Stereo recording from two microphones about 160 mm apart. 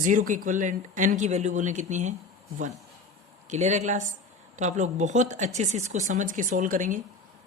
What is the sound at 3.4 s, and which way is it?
A woman's voice, 45° right (ahead or behind).